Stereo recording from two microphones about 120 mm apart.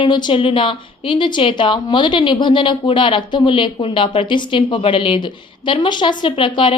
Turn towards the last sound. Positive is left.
turn(degrees=45)  # may be behind; listen again after turning